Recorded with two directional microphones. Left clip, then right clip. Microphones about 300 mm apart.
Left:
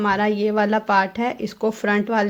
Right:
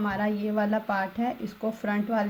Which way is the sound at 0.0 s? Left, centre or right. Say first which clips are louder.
Left 10 dB; left.